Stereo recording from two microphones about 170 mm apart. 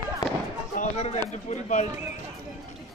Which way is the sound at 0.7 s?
45° left (ahead or behind).